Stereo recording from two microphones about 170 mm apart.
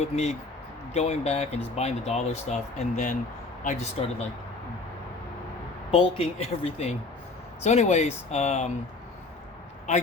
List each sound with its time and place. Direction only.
0.0 s speech: 40° left (ahead or behind)
5.9 s speech: 35° left (ahead or behind)